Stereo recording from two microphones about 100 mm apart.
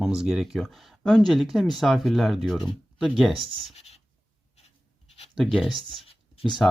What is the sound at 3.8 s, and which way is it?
Writing, 90° left.